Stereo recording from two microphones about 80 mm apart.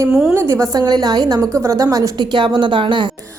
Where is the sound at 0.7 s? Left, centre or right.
Right.